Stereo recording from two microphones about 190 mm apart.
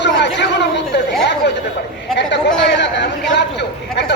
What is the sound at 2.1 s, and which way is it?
A man's voice, 70° left (ahead or behind).